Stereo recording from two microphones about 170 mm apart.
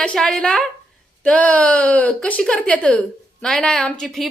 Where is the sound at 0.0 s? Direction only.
5° left (ahead or behind).